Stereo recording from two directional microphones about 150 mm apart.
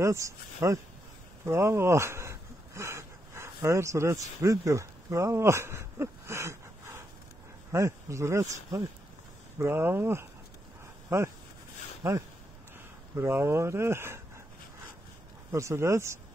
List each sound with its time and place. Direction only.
0.0 s speech: 20° right (ahead or behind)
1.4 s a sound: 15° right (ahead or behind)
4.4 s speech: 20° right (ahead or behind)
9.6 s speech: 15° right (ahead or behind)
12.0 s speech: 20° right (ahead or behind)
15.5 s speech: 20° right (ahead or behind)